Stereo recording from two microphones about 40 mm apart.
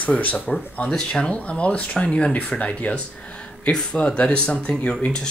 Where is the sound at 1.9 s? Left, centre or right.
Left.